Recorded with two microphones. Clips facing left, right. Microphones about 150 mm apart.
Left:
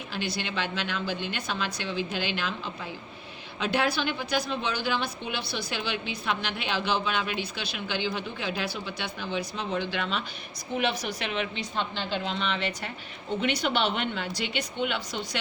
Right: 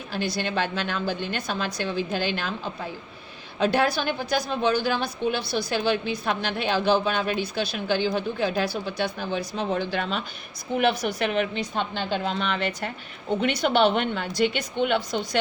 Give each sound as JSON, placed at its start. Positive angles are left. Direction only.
{"t": 0.1, "sound": "a woman's voice", "side_deg": -40}